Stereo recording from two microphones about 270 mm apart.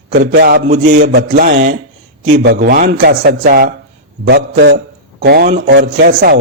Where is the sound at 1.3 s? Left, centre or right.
Right.